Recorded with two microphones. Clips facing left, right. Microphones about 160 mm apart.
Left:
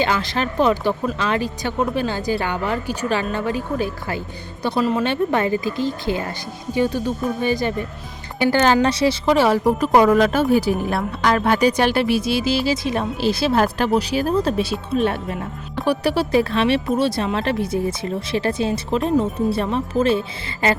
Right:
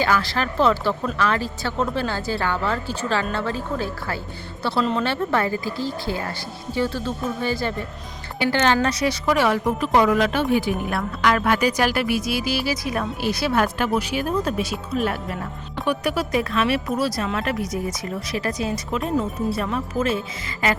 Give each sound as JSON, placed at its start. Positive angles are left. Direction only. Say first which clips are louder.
{"t": 0.0, "sound": "a woman's voice", "louder": "left 1 dB", "side_deg": 20}
{"t": 8.5, "sound": "a woman's voice", "louder": "left 3 dB", "side_deg": 35}